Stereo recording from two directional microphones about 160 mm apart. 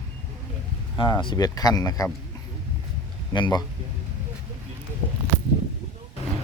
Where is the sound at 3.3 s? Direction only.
25° left (ahead or behind).